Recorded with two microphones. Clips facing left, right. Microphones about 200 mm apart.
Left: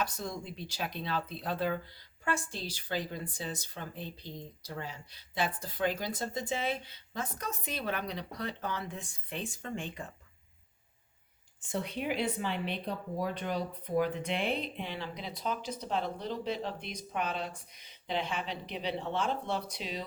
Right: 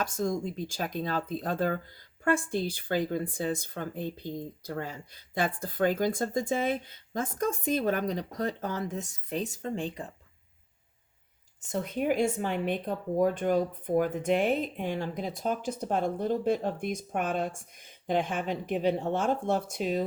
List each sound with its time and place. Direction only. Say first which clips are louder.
0.0 s speech: right 7 dB; 45° right (ahead or behind)
11.6 s speech: right 5 dB; 45° right (ahead or behind)